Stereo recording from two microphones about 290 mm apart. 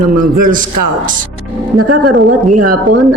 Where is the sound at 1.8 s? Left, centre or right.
Right.